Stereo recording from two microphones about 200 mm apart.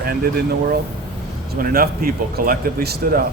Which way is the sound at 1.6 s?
50° right (ahead or behind).